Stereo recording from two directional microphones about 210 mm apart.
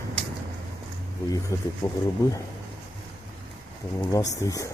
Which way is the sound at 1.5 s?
15° left (ahead or behind).